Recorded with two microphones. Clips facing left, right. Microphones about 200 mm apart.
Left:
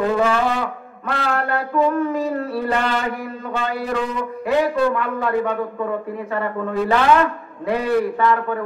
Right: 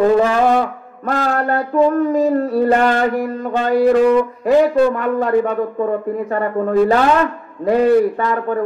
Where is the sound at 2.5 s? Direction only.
45° right (ahead or behind).